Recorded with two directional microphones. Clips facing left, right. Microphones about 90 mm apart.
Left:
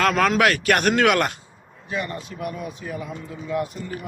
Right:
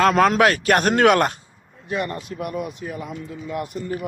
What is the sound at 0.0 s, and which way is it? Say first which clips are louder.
A man's voice: right 3 dB; 30° right (ahead or behind).